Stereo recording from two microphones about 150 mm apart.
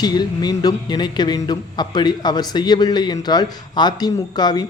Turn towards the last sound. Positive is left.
turn(degrees=30)  # may be behind; listen again after turning